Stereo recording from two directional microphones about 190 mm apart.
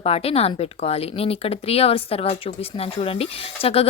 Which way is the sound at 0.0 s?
30° left (ahead or behind).